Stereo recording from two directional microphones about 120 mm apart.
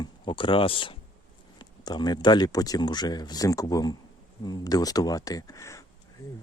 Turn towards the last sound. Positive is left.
turn(degrees=30)  # may be behind; listen again after turning